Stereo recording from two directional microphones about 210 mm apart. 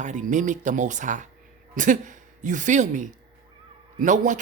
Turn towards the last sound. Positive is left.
turn(degrees=-35)  # may be behind; listen again after turning